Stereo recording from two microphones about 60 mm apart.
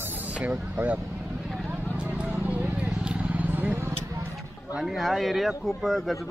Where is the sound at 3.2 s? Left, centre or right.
Right.